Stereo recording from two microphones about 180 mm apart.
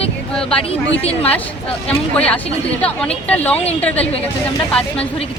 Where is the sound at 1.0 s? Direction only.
35° left (ahead or behind).